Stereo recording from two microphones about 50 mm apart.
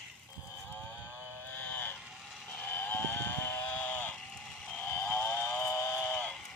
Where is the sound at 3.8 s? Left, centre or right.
Left.